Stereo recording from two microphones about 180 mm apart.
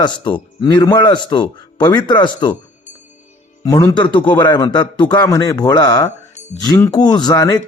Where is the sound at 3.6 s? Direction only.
20° left (ahead or behind).